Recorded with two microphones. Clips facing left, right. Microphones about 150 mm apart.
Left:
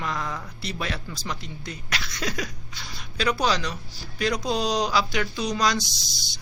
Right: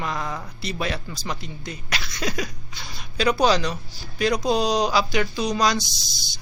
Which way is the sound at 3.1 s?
20° right (ahead or behind).